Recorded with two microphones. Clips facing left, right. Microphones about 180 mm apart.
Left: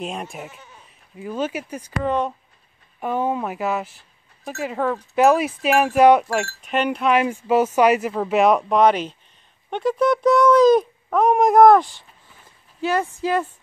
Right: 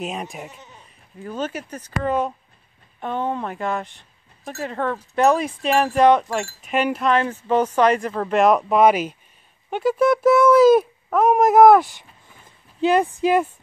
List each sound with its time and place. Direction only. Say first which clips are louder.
0.0 s speech: right 1 dB; centre (ahead or behind)
2.0 s speech: even; 5° right (ahead or behind)
3.0 s speech: left 2 dB; 10° left (ahead or behind)
6.4 s speech: even; 5° right (ahead or behind)
7.1 s speech: left 4 dB; 10° left (ahead or behind); by 13.5 s 15° right (ahead or behind)